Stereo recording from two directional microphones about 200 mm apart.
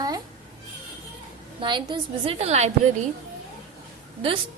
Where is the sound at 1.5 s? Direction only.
25° right (ahead or behind).